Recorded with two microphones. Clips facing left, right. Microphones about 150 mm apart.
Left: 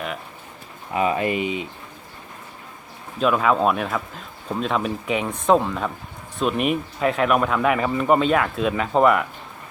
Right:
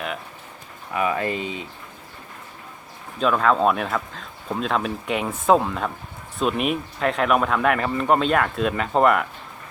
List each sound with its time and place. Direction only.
0.9 s speech: 20° left (ahead or behind)
3.2 s speech: 5° left (ahead or behind)